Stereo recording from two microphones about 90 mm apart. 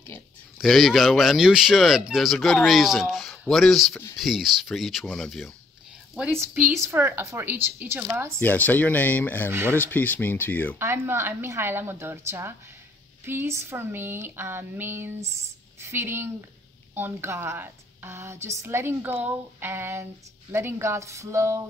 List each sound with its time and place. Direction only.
0.6 s speech: centre (ahead or behind)
6.8 s speech: 25° right (ahead or behind)
8.4 s speech: 20° left (ahead or behind)
9.5 s speech: 25° right (ahead or behind)
9.8 s speech: 20° left (ahead or behind)
10.8 s speech: 30° right (ahead or behind)